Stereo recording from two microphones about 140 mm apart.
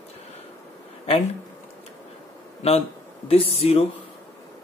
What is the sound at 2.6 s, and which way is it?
Speech, 50° left (ahead or behind).